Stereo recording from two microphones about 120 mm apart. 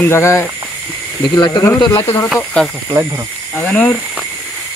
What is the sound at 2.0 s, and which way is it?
Speech, 20° left (ahead or behind).